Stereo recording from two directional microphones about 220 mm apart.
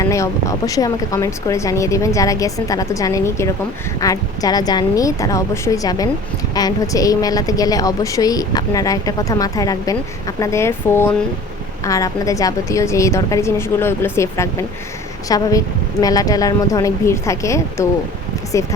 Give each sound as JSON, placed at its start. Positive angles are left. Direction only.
{"t": 0.0, "sound": "a woman's voice", "side_deg": 15}